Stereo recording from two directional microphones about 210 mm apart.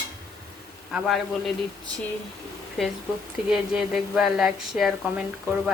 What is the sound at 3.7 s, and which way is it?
Speech, 5° right (ahead or behind).